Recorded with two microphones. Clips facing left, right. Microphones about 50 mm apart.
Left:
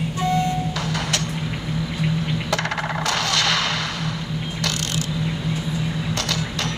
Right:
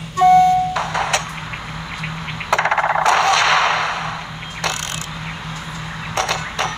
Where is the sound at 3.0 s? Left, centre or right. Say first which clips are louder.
Right 7 dB; right.